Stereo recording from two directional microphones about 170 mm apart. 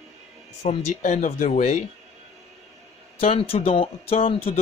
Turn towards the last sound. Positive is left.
turn(degrees=35)  # may be behind; listen again after turning